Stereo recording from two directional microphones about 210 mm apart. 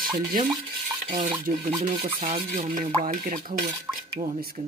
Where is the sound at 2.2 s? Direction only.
40° right (ahead or behind).